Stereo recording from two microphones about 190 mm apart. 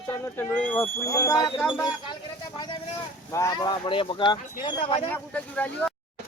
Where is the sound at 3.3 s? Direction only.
20° left (ahead or behind).